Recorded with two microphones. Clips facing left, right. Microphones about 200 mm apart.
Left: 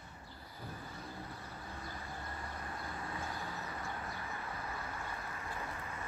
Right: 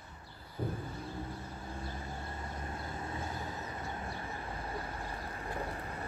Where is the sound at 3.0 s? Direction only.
25° right (ahead or behind).